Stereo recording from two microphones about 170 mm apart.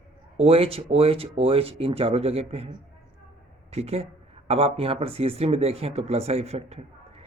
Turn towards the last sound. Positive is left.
turn(degrees=-35)  # may be behind; listen again after turning